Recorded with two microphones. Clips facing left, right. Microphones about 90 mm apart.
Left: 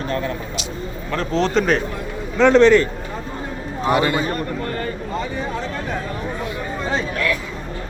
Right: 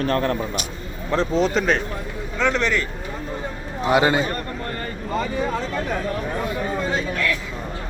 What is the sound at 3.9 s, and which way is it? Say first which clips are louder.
Speech: right 1 dB; 25° right (ahead or behind).